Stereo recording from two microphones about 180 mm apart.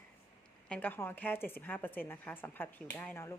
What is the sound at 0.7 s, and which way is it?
A woman's voice, 10° left (ahead or behind).